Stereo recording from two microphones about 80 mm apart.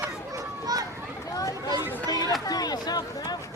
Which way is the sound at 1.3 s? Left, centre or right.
Left.